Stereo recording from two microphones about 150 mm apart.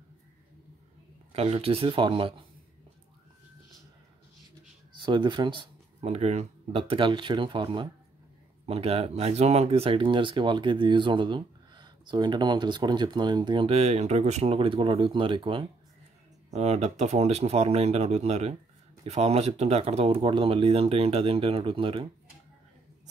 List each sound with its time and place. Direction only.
1.3 s speech: 40° right (ahead or behind)
4.9 s speech: 30° right (ahead or behind)
16.4 s speech: 45° right (ahead or behind)